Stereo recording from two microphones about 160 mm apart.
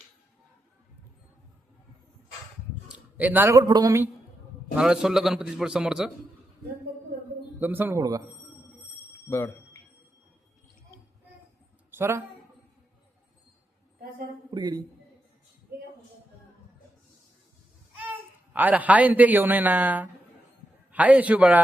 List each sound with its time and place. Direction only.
2.9 s speech: 10° right (ahead or behind)
4.7 s a man's voice: 5° right (ahead or behind)
7.6 s a man's voice: 10° right (ahead or behind)
11.9 s a sound: 15° right (ahead or behind)
14.5 s a man's voice: 25° right (ahead or behind)
17.9 s a man's voice: 10° right (ahead or behind)